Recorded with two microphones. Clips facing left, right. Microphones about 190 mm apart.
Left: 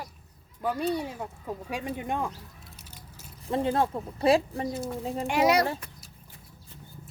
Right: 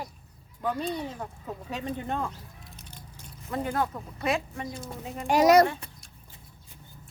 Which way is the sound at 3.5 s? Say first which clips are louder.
Left 4 dB; 25° left (ahead or behind).